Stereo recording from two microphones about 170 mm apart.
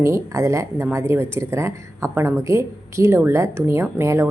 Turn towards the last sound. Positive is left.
turn(degrees=-15)  # may be behind; listen again after turning